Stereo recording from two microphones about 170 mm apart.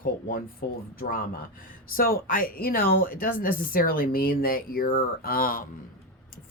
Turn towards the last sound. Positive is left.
turn(degrees=60)  # may be behind; listen again after turning